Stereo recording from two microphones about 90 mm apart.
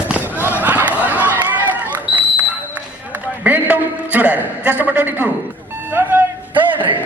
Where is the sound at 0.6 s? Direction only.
20° right (ahead or behind).